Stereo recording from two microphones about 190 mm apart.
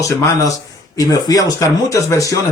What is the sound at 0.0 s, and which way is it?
Speech, 15° left (ahead or behind).